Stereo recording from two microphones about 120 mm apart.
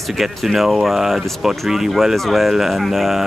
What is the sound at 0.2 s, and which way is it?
Speech, centre (ahead or behind).